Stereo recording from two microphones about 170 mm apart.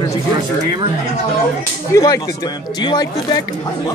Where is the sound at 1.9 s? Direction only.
20° left (ahead or behind).